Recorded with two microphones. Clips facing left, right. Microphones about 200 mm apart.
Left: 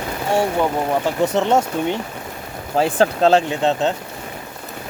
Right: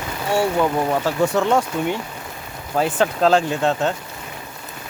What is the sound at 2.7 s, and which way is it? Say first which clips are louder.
Speech: left 3 dB; 30° left (ahead or behind).